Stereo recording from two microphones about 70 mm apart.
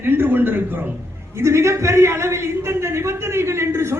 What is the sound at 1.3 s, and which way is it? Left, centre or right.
A man's voice, right.